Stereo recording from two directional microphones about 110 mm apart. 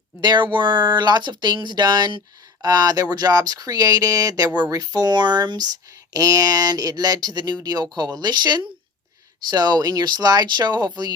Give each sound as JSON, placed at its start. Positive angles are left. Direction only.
{"t": 0.2, "sound": "speech", "side_deg": -45}